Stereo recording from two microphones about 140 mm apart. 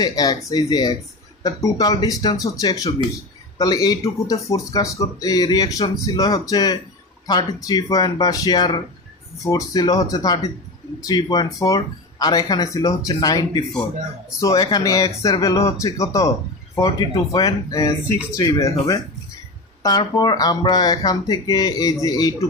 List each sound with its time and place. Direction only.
0.0 s speech: 30° left (ahead or behind)
17.3 s speech: 25° left (ahead or behind)